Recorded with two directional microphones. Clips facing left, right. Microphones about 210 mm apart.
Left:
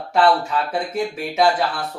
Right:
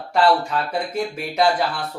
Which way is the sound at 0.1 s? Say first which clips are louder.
Left 1 dB; centre (ahead or behind).